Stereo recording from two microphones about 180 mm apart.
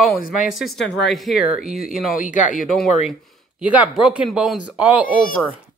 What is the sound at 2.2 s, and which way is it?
Speech, 45° left (ahead or behind).